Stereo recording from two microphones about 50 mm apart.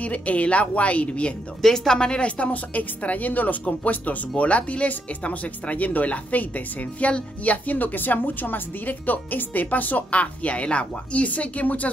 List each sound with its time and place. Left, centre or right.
0.0 s a woman's voice: left
1.6 s a woman's voice: centre; by 11.9 s left